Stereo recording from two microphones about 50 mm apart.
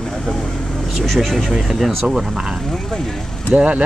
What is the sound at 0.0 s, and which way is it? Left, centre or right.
Vehicle, centre.